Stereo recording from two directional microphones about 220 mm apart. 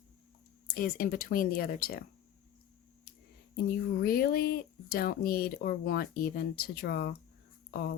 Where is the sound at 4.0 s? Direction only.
40° left (ahead or behind).